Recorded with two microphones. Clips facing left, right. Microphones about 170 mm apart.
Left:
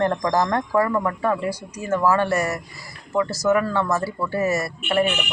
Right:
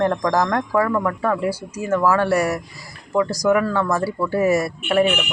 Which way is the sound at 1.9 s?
10° left (ahead or behind).